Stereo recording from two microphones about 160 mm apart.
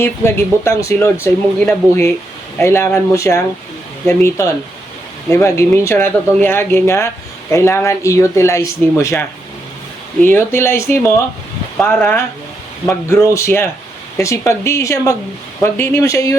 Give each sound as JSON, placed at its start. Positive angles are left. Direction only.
{"t": 0.0, "sound": "speech", "side_deg": 15}
{"t": 2.6, "sound": "speech", "side_deg": 15}